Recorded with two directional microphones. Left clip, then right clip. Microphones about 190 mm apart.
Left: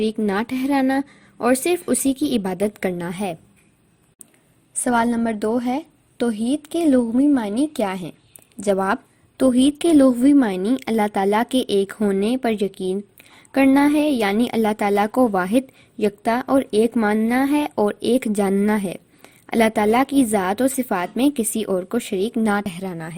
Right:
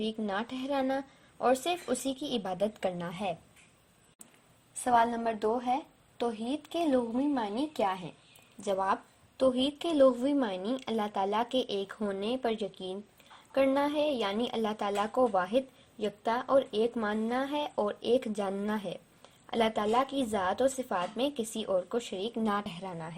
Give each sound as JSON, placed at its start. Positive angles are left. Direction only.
{"t": 0.0, "sound": "a woman's voice", "side_deg": 40}
{"t": 4.8, "sound": "a woman's voice", "side_deg": 35}